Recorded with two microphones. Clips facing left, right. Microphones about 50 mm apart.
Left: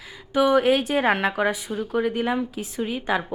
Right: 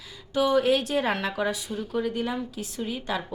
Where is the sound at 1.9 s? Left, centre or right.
Left.